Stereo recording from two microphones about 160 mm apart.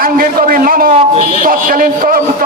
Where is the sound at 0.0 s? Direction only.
60° right (ahead or behind).